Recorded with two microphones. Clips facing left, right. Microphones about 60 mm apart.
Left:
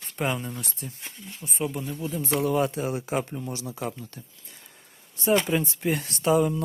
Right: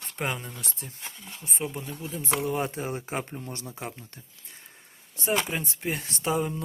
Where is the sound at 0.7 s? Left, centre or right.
Right.